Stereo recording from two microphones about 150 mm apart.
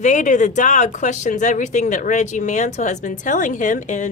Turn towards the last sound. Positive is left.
turn(degrees=55)  # may be behind; listen again after turning